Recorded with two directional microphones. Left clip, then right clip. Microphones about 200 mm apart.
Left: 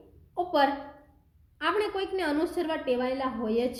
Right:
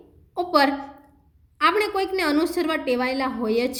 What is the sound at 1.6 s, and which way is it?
A woman's voice, 35° right (ahead or behind).